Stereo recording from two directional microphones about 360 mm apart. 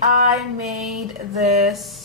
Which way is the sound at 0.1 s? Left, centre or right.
Right.